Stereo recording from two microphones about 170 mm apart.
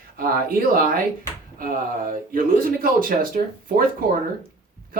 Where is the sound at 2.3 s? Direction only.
55° right (ahead or behind).